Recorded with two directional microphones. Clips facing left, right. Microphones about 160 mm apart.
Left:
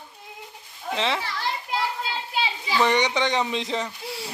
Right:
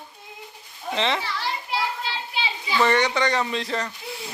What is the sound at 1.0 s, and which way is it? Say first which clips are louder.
Speech: right 2 dB; 5° left (ahead or behind).